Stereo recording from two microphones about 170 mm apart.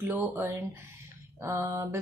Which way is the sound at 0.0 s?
10° right (ahead or behind).